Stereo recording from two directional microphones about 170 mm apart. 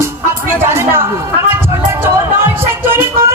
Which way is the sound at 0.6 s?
15° right (ahead or behind).